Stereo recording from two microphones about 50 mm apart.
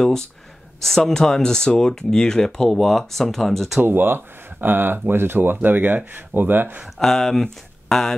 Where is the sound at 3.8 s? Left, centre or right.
Right.